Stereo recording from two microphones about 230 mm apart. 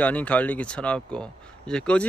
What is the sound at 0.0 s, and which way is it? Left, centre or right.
Speech, centre.